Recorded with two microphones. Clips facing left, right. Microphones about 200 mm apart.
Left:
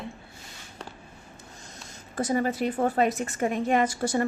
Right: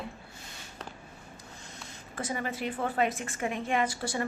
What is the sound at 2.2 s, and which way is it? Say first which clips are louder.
A woman's voice: left 8 dB; 40° left (ahead or behind).